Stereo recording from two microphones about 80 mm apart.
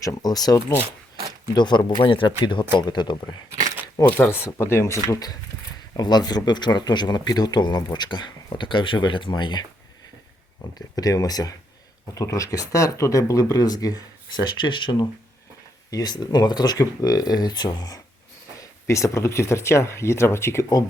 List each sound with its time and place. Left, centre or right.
0.0 s speech: left
1.5 s speech: left
2.7 s speech: left
4.2 s speech: left
5.1 s speech: left
10.8 s speech: left
15.9 s speech: left
18.6 s speech: left